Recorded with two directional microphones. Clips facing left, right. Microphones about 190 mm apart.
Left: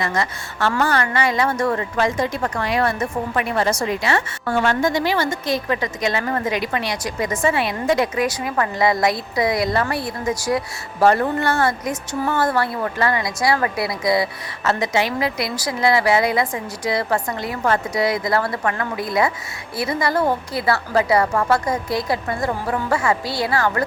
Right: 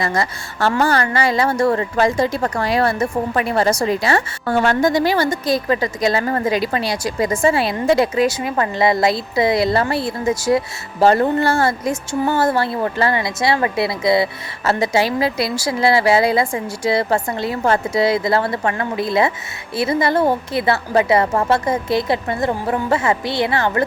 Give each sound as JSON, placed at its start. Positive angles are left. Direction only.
{"t": 0.0, "sound": "a woman's voice", "side_deg": -35}